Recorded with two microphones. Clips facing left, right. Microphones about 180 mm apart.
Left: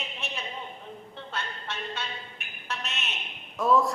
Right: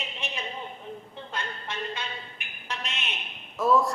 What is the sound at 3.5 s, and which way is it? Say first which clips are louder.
Speech: even; centre (ahead or behind).